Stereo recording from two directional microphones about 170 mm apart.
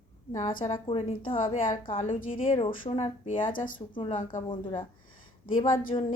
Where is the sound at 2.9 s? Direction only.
30° left (ahead or behind).